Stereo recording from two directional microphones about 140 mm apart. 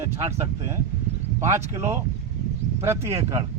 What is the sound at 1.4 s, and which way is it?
Speech, 20° right (ahead or behind).